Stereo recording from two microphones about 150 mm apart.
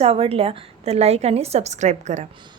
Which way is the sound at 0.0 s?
40° right (ahead or behind).